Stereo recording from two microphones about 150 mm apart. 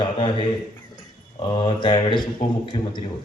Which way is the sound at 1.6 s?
30° left (ahead or behind).